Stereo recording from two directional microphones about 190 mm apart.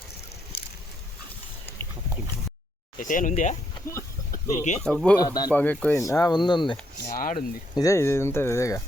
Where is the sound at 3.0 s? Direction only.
45° left (ahead or behind).